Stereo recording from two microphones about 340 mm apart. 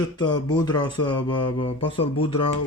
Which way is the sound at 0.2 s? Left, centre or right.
Centre.